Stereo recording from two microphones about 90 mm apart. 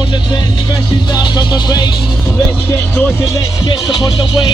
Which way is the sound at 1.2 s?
50° left (ahead or behind).